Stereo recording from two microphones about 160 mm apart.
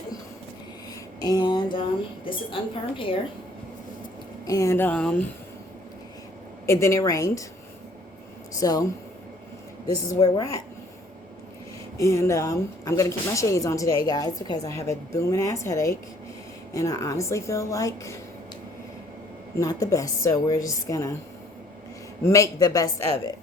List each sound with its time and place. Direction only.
1.2 s a woman's voice: 25° left (ahead or behind)
4.4 s speech: 20° left (ahead or behind)
6.7 s speech: 15° left (ahead or behind)
8.5 s speech: 20° left (ahead or behind)
10.2 s speech: 25° left (ahead or behind)
11.9 s speech: 15° left (ahead or behind)
19.5 s speech: 20° left (ahead or behind)
22.2 s speech: 20° left (ahead or behind)